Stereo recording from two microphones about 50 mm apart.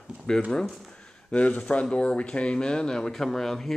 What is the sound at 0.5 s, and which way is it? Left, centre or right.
Speech, centre.